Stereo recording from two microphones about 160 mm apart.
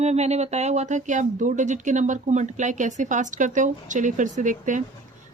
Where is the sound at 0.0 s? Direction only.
45° right (ahead or behind).